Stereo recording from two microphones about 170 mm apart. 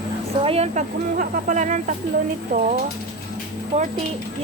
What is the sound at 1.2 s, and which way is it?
Speech, 50° right (ahead or behind).